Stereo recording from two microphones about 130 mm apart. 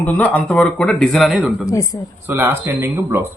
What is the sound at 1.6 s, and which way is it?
Speech, 25° left (ahead or behind).